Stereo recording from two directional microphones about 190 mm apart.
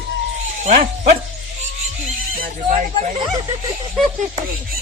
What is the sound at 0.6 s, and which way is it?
Speech, 35° right (ahead or behind).